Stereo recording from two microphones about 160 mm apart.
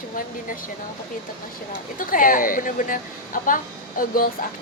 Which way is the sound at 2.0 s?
60° left (ahead or behind).